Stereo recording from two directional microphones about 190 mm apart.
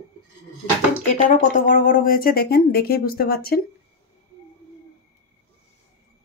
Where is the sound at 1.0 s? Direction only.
40° left (ahead or behind).